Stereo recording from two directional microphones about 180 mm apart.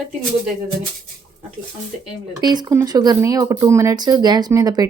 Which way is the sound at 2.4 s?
25° right (ahead or behind).